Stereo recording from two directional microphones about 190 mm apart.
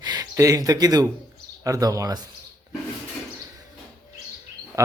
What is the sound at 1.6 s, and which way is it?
Speech, 20° right (ahead or behind).